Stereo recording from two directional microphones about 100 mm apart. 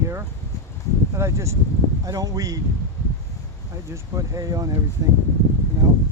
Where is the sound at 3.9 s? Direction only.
30° right (ahead or behind).